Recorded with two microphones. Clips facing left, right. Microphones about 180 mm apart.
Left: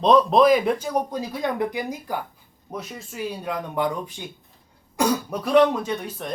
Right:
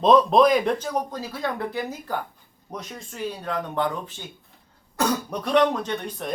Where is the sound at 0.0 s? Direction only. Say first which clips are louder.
Even; centre (ahead or behind).